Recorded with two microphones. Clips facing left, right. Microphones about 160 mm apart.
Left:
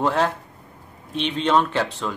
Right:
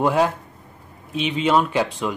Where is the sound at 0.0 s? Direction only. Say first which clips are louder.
Right 2 dB; 10° right (ahead or behind).